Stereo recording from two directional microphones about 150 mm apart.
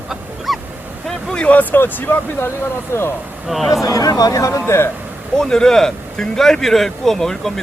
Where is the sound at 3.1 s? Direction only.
10° right (ahead or behind).